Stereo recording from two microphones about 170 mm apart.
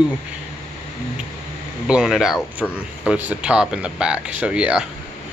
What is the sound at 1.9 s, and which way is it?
Speech, 5° right (ahead or behind).